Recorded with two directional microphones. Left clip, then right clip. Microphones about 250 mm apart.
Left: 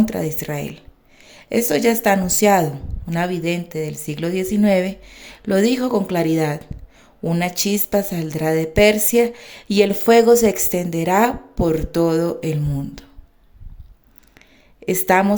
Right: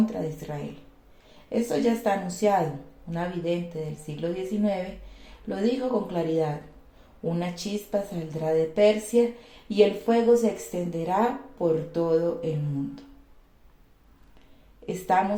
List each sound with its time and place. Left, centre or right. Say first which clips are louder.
0.0 s a woman's voice: left 7 dB; left
14.8 s a woman's voice: left 8 dB; left